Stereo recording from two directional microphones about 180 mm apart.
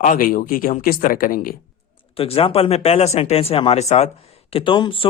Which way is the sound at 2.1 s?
35° left (ahead or behind).